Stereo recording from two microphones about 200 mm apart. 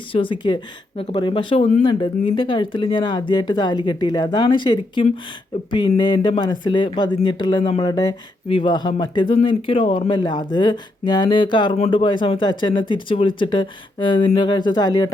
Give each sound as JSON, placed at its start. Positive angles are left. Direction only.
{"t": 0.1, "sound": "speech", "side_deg": 25}
{"t": 1.6, "sound": "speech", "side_deg": 35}
{"t": 2.0, "sound": "speech", "side_deg": 25}